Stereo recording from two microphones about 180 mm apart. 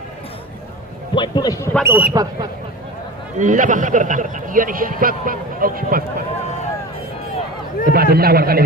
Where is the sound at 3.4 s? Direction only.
45° right (ahead or behind).